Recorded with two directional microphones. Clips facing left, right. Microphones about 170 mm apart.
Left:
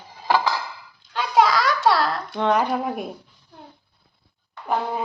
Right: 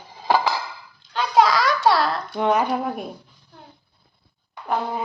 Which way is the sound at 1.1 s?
Centre (ahead or behind).